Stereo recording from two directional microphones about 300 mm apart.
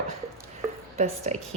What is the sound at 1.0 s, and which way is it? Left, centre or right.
Speech, right.